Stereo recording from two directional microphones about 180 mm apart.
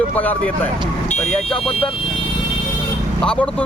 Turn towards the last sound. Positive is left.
turn(degrees=5)  # may be behind; listen again after turning